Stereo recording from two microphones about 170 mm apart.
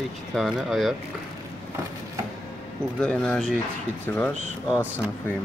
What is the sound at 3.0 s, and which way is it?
Speech, 5° left (ahead or behind).